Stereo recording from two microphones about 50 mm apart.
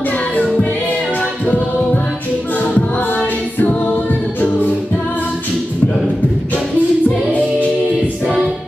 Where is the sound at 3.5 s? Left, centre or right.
Left.